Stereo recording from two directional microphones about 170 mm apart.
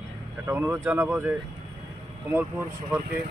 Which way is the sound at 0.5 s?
15° right (ahead or behind).